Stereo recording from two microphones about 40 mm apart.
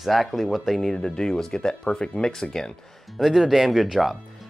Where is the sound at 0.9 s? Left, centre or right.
Centre.